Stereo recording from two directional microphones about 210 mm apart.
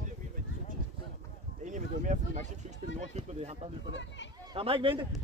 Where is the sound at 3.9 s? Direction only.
60° left (ahead or behind).